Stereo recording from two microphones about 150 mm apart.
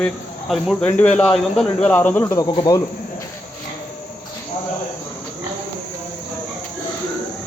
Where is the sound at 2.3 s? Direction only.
25° left (ahead or behind).